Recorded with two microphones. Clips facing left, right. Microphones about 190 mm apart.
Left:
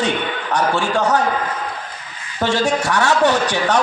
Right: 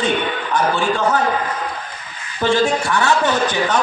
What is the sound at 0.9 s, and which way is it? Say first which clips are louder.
Speech: left 1 dB; 45° left (ahead or behind).